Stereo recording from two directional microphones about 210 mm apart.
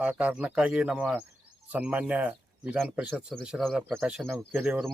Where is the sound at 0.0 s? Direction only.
5° right (ahead or behind).